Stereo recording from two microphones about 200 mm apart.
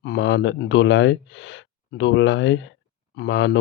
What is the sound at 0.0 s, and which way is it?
Speech, 60° left (ahead or behind).